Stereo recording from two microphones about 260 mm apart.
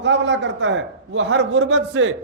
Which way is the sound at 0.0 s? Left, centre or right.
Right.